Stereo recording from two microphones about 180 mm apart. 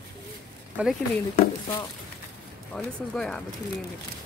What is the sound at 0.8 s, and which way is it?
Speech, 10° right (ahead or behind).